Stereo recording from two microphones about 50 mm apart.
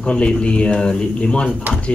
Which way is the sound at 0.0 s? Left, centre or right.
Centre.